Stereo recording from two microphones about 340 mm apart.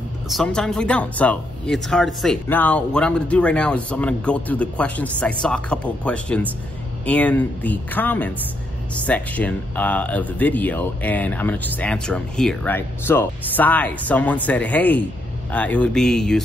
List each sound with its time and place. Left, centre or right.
0.3 s speech: centre